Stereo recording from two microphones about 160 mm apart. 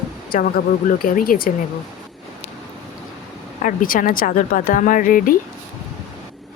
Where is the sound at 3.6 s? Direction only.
60° left (ahead or behind).